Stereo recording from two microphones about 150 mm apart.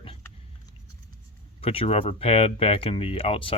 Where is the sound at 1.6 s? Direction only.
40° left (ahead or behind).